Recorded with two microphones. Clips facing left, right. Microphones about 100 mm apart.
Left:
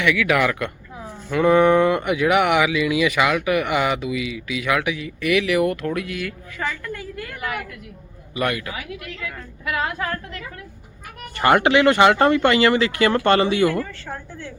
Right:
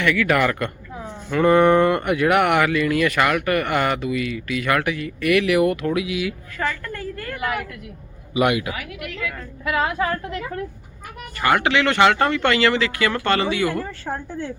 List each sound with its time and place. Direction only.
0.0 s speech: 5° left (ahead or behind)
0.9 s a sound: 20° right (ahead or behind)
1.3 s speech: 5° left (ahead or behind)
6.7 s a woman's voice: 10° left (ahead or behind)
7.3 s speech: centre (ahead or behind)
8.3 s a man's voice: 15° right (ahead or behind)
8.7 s speech: 25° left (ahead or behind)
9.6 s speech: centre (ahead or behind)
11.3 s speech: 30° left (ahead or behind)
12.8 s speech: 30° left (ahead or behind)
13.7 s a woman's voice: 35° right (ahead or behind)